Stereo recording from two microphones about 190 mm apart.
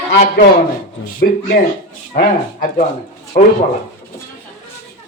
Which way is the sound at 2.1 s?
55° left (ahead or behind).